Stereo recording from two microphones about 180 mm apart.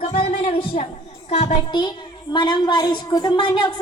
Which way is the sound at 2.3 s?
25° left (ahead or behind).